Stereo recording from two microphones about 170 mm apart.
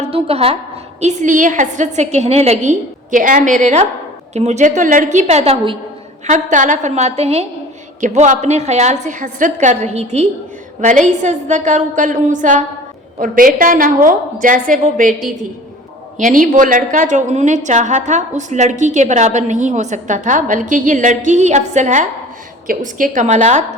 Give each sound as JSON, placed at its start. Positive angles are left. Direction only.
{"t": 0.0, "sound": "a woman's voice", "side_deg": -35}
{"t": 1.0, "sound": "a woman's voice", "side_deg": -45}
{"t": 16.1, "sound": "a woman's voice", "side_deg": -50}